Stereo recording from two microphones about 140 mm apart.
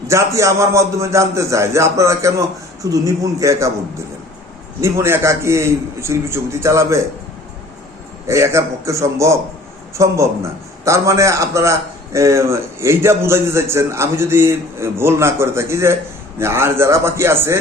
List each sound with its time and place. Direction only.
0.1 s a man's voice: 20° right (ahead or behind)
4.8 s a man's voice: 20° right (ahead or behind)
8.3 s a man's voice: 20° right (ahead or behind)